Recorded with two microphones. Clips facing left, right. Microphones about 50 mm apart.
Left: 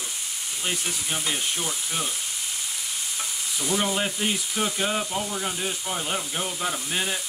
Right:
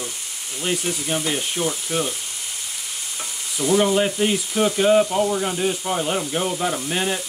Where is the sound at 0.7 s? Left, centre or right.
Centre.